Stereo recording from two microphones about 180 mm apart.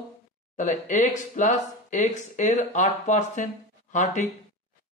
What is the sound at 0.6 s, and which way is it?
Speech, 45° left (ahead or behind).